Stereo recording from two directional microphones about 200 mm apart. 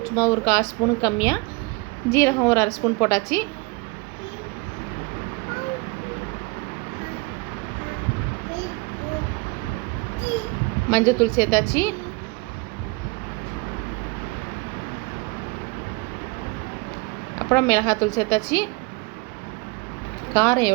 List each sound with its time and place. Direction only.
0.0 s a woman's voice: 15° left (ahead or behind)
10.9 s a woman's voice: 15° left (ahead or behind)
17.5 s a woman's voice: 15° left (ahead or behind)
20.3 s a woman's voice: 15° left (ahead or behind)